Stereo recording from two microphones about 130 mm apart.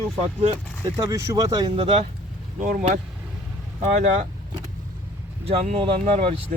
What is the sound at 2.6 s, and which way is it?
Speech, 90° right.